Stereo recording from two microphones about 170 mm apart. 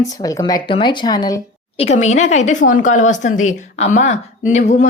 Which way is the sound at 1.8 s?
40° left (ahead or behind).